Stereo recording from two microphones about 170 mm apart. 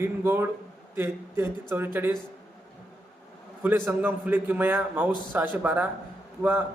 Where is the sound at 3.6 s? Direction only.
10° right (ahead or behind).